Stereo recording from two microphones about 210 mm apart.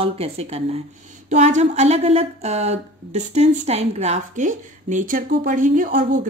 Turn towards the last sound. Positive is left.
turn(degrees=-40)  # may be behind; listen again after turning